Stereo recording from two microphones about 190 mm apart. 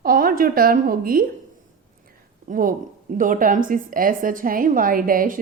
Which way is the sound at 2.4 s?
45° right (ahead or behind).